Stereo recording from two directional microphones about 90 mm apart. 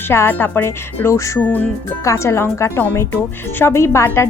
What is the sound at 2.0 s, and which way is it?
A woman's voice, 30° left (ahead or behind).